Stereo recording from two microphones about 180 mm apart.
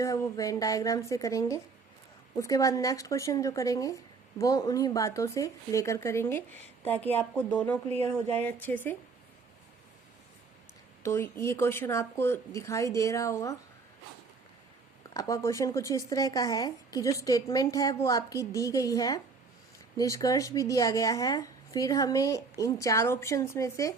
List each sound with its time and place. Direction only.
0.0 s a woman's voice: 20° left (ahead or behind)
11.0 s speech: 15° left (ahead or behind)
15.1 s a woman's voice: 15° left (ahead or behind)